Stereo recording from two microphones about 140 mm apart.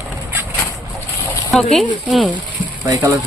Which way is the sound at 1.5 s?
Centre (ahead or behind).